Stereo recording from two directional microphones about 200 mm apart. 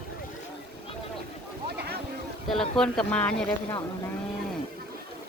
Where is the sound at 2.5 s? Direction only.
5° left (ahead or behind).